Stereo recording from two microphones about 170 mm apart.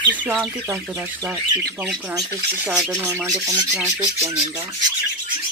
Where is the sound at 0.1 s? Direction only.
10° right (ahead or behind).